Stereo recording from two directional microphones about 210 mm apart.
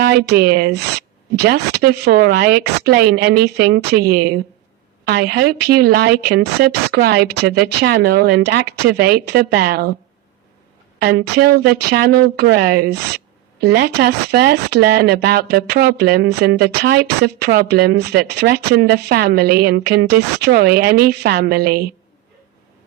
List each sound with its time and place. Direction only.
0.0 s speech: 50° right (ahead or behind)
11.3 s speech: 50° right (ahead or behind)